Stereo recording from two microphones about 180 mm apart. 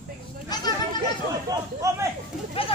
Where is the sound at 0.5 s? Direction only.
20° left (ahead or behind).